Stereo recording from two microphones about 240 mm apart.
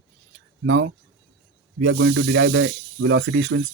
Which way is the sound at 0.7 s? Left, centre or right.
Right.